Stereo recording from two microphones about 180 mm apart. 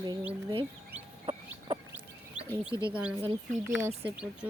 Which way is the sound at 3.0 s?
5° right (ahead or behind).